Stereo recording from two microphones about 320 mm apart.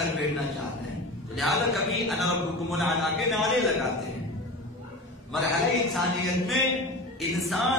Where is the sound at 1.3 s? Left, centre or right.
Centre.